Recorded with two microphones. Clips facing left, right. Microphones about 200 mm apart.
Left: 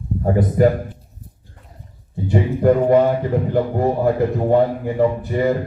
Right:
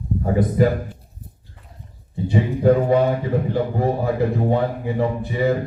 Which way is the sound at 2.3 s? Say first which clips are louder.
Left 1 dB; 60° left (ahead or behind).